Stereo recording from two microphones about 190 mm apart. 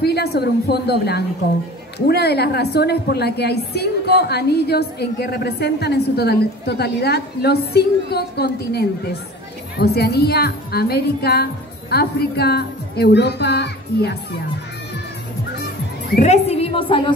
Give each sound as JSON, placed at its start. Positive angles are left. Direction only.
{"t": 0.0, "sound": "a woman's voice", "side_deg": 60}
{"t": 16.2, "sound": "a woman's voice", "side_deg": 35}